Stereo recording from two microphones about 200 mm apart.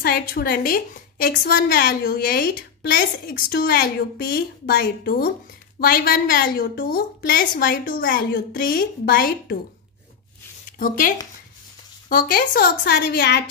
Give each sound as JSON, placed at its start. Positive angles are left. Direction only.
{"t": 0.0, "sound": "a woman's voice", "side_deg": 50}
{"t": 10.8, "sound": "a woman's voice", "side_deg": 45}